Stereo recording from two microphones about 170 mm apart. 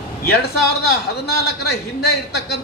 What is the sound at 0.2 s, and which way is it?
Speech, 65° left (ahead or behind).